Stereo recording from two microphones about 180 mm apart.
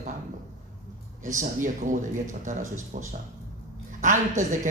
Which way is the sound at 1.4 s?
45° right (ahead or behind).